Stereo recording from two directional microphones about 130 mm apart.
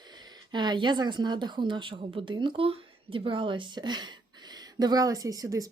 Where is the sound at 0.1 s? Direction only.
35° right (ahead or behind).